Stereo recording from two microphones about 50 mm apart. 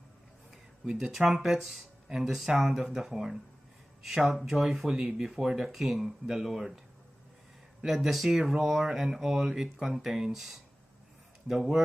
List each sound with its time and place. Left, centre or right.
0.8 s speech: centre
7.8 s speech: centre